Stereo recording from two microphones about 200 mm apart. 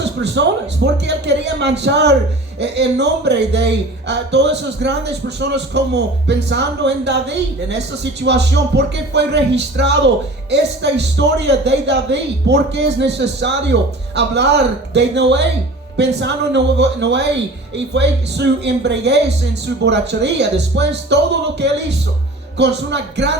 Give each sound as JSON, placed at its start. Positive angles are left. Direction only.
{"t": 0.2, "sound": "a man's voice", "side_deg": -60}